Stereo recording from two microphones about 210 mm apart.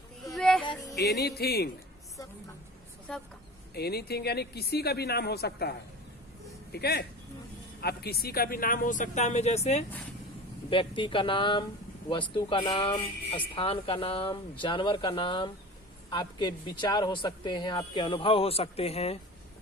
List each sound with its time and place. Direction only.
0.3 s music: centre (ahead or behind)
0.9 s speech: 50° left (ahead or behind)
3.1 s speech: 5° left (ahead or behind)
3.8 s speech: 50° left (ahead or behind); by 19.2 s 30° left (ahead or behind)